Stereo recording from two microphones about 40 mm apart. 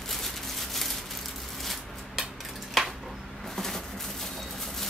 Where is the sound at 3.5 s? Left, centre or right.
Centre.